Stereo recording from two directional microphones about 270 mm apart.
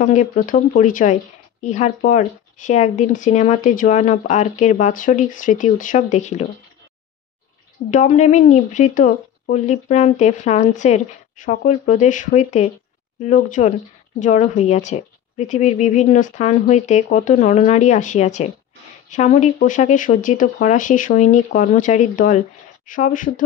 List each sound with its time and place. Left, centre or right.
0.0 s speech: left
7.9 s speech: left